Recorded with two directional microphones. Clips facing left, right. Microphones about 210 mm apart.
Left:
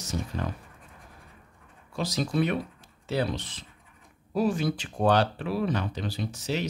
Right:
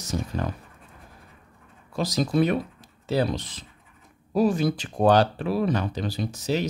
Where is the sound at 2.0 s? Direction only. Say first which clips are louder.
Right 4 dB; 40° right (ahead or behind).